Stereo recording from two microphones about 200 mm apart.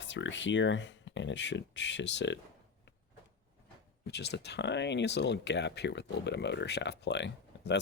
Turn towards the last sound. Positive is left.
turn(degrees=60)  # may be behind; listen again after turning